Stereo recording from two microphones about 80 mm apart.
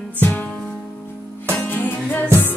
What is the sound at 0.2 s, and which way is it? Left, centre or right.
Music, centre.